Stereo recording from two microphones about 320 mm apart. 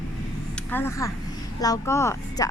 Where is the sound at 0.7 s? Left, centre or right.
Centre.